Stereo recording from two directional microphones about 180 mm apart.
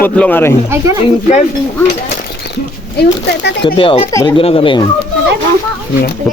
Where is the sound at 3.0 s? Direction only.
70° left (ahead or behind).